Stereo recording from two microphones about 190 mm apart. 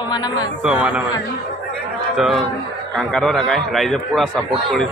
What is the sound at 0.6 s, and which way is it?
Speech, 5° right (ahead or behind).